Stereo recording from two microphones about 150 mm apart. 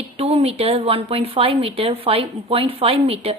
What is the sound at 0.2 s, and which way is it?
Speech, 40° right (ahead or behind).